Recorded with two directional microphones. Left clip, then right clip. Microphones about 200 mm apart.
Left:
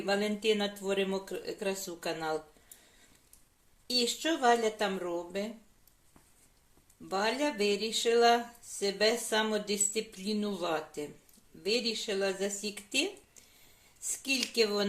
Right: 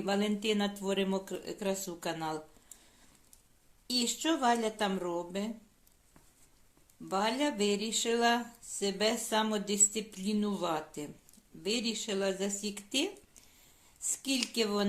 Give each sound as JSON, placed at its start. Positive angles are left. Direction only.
{"t": 0.0, "sound": "speech", "side_deg": -55}
{"t": 3.8, "sound": "speech", "side_deg": -55}
{"t": 7.1, "sound": "speech", "side_deg": -55}
{"t": 14.1, "sound": "speech", "side_deg": -55}